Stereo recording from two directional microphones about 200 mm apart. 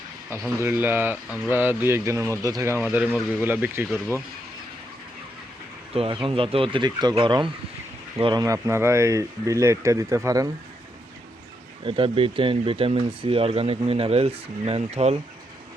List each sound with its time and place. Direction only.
0.6 s speech: 10° right (ahead or behind)
5.9 s speech: 30° right (ahead or behind)
11.9 s speech: 25° right (ahead or behind)